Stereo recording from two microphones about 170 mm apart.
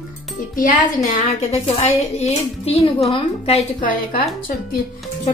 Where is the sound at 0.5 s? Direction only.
45° left (ahead or behind).